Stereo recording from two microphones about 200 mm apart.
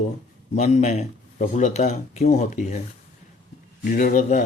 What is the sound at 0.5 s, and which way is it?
Speech, 35° left (ahead or behind).